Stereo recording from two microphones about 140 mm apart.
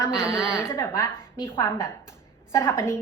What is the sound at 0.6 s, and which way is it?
A woman's voice, 20° left (ahead or behind).